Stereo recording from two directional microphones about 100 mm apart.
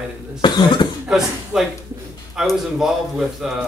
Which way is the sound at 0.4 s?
50° left (ahead or behind).